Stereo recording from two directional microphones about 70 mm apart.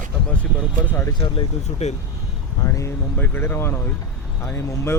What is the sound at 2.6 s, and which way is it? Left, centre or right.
Speech, left.